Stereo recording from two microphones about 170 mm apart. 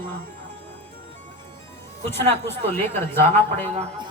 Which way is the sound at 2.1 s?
15° left (ahead or behind).